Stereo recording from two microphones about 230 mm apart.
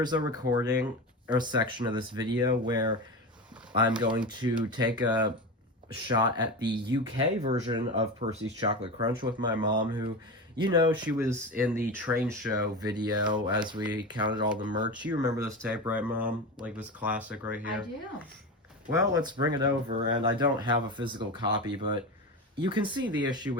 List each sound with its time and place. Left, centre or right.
0.0 s speech: centre
15.1 s speech: right
15.6 s speech: centre
18.9 s speech: centre